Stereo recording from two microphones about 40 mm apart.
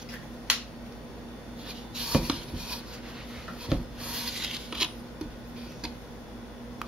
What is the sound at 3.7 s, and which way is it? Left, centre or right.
Rub, centre.